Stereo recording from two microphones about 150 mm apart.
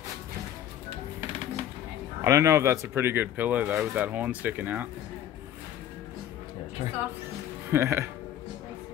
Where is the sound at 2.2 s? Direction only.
20° right (ahead or behind).